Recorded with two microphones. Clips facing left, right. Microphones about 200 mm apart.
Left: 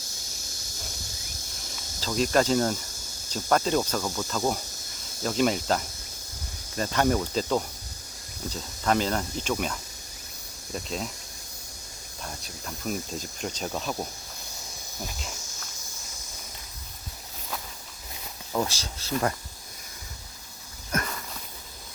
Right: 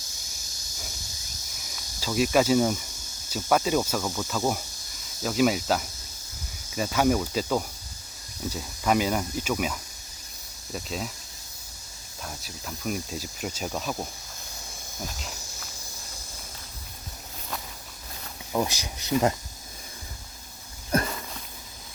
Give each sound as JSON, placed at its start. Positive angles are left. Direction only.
{"t": 2.0, "sound": "speech", "side_deg": -10}
{"t": 12.2, "sound": "speech", "side_deg": -5}
{"t": 15.0, "sound": "cricket", "side_deg": 0}
{"t": 18.5, "sound": "speech", "side_deg": -15}
{"t": 20.9, "sound": "a sound", "side_deg": -30}